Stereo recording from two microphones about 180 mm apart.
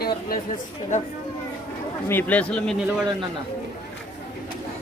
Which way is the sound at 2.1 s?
10° left (ahead or behind).